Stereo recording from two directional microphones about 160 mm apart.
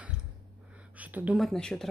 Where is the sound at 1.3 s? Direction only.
Centre (ahead or behind).